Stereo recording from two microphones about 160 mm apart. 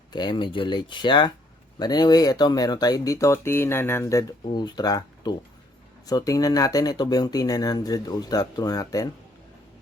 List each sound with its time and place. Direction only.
0.1 s speech: 30° left (ahead or behind)